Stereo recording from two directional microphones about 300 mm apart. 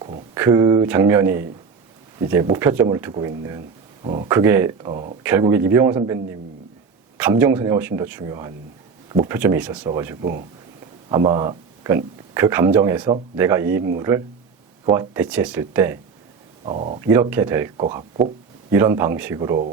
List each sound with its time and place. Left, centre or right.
0.3 s speech: centre
4.3 s speech: centre
7.2 s speech: centre
16.6 s speech: right
17.1 s speech: centre